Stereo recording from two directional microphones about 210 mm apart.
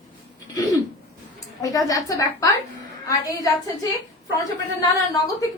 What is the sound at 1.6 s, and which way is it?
A woman's voice, 15° left (ahead or behind).